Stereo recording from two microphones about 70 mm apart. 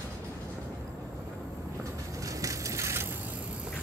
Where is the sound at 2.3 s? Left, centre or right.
Right.